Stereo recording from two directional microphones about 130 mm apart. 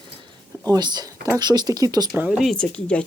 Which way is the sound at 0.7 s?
35° right (ahead or behind).